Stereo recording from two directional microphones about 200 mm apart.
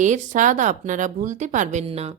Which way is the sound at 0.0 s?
40° right (ahead or behind).